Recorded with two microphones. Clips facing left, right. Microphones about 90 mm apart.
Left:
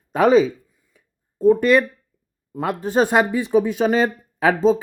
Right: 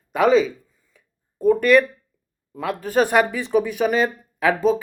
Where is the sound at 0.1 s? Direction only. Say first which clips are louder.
Left 2 dB; 40° left (ahead or behind).